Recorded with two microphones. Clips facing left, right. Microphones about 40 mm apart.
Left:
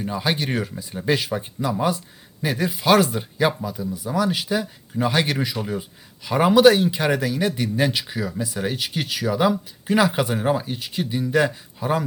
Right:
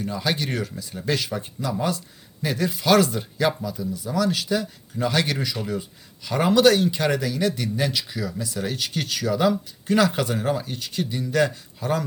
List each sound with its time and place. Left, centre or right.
0.0 s speech: centre